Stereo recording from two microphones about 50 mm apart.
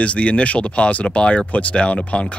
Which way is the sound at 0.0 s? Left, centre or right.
Left.